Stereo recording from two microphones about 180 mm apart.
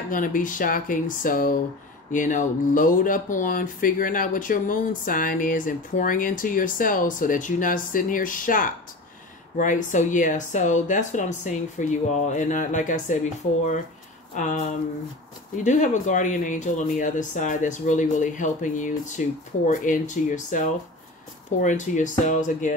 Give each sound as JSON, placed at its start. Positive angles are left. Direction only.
{"t": 0.1, "sound": "speech", "side_deg": 50}
{"t": 14.3, "sound": "speech", "side_deg": 45}